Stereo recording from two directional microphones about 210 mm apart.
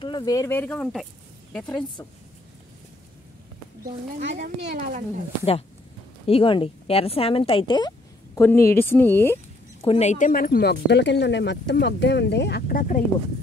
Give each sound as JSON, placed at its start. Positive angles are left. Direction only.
{"t": 0.0, "sound": "speech", "side_deg": 20}
{"t": 1.7, "sound": "speech", "side_deg": 20}
{"t": 4.2, "sound": "speech", "side_deg": -55}
{"t": 6.2, "sound": "speech", "side_deg": 25}
{"t": 8.4, "sound": "speech", "side_deg": 10}
{"t": 9.8, "sound": "speech", "side_deg": 30}